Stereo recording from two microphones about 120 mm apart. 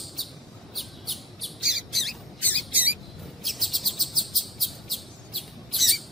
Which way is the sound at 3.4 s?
Centre (ahead or behind).